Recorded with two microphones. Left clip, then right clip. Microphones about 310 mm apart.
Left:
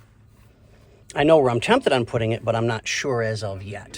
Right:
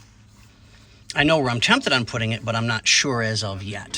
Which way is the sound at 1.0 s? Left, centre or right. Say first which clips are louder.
Left 3 dB; centre.